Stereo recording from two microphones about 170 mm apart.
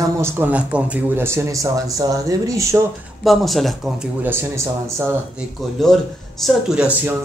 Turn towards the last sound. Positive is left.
turn(degrees=-5)  # may be behind; listen again after turning